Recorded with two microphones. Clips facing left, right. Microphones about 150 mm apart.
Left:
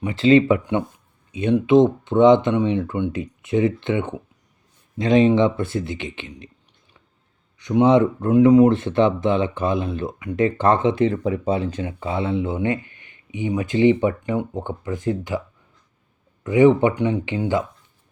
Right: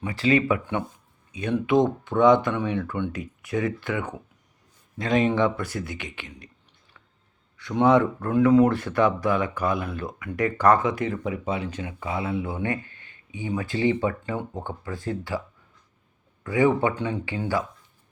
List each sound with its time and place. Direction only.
0.0 s speech: 25° left (ahead or behind)
7.5 s speech: 20° left (ahead or behind)
16.4 s speech: 20° left (ahead or behind)